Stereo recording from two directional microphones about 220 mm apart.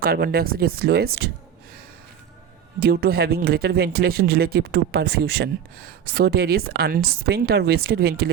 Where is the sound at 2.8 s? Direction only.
45° right (ahead or behind).